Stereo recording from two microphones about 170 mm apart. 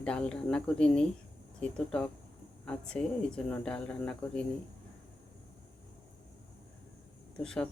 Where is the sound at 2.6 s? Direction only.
5° left (ahead or behind).